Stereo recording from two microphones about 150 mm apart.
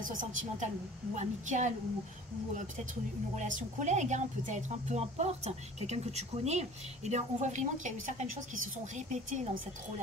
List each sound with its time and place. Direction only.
0.0 s a woman's voice: 60° right (ahead or behind)